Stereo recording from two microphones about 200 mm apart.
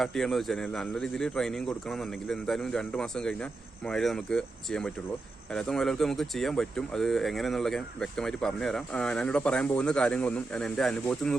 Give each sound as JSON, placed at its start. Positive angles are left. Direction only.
{"t": 0.0, "sound": "speech", "side_deg": 0}